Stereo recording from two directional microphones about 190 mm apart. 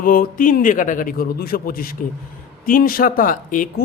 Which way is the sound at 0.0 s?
50° left (ahead or behind).